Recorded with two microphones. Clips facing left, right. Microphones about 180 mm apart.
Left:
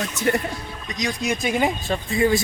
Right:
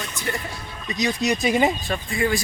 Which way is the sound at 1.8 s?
25° left (ahead or behind).